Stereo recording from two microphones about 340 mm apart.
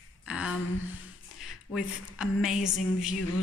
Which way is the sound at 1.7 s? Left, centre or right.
Centre.